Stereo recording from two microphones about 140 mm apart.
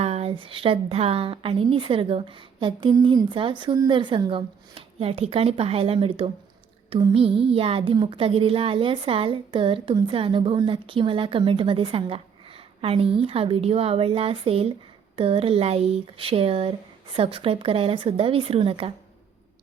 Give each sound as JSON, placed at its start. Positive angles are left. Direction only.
{"t": 0.0, "sound": "a woman's voice", "side_deg": -50}